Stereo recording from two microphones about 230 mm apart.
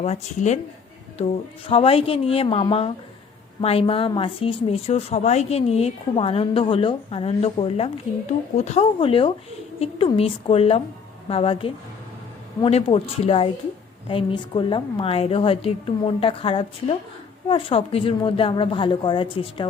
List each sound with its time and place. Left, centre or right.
0.0 s a woman's voice: left